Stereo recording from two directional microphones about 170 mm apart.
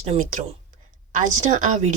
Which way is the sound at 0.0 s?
40° right (ahead or behind).